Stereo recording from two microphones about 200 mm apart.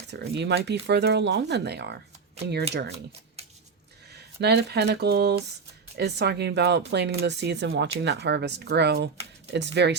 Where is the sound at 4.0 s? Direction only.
55° right (ahead or behind).